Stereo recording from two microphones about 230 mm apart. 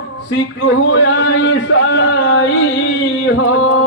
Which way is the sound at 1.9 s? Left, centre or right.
Left.